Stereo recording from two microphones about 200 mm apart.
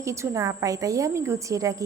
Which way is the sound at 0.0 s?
15° right (ahead or behind).